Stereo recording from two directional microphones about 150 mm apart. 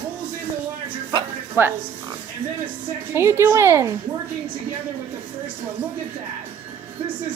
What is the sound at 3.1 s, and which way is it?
Speech, 15° right (ahead or behind).